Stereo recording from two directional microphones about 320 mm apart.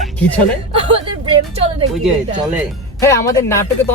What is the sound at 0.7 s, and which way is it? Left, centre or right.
Speech, centre.